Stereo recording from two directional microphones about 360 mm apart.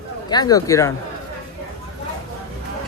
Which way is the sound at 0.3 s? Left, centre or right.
Centre.